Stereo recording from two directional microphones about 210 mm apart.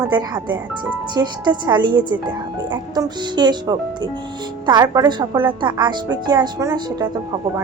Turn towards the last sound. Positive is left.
turn(degrees=-20)  # may be behind; listen again after turning